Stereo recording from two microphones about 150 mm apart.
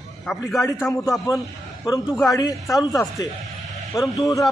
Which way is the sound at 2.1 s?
25° left (ahead or behind).